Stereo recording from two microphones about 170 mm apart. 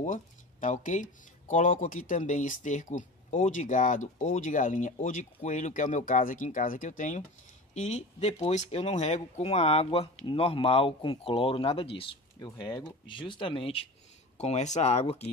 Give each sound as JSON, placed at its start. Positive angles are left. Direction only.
{"t": 0.0, "sound": "speech", "side_deg": 50}